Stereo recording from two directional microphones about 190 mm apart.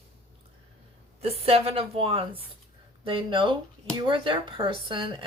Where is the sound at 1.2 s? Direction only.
30° right (ahead or behind).